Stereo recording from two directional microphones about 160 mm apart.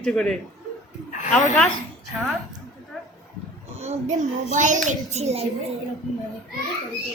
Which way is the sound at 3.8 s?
45° right (ahead or behind).